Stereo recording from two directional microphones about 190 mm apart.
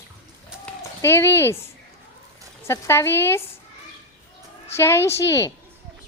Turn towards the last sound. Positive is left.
turn(degrees=15)  # may be behind; listen again after turning